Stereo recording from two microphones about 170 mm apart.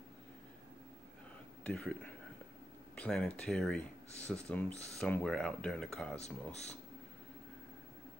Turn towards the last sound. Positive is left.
turn(degrees=40)  # may be behind; listen again after turning